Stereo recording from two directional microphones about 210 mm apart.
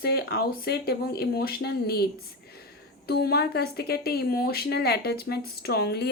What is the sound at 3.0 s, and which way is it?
Speech, 50° left (ahead or behind).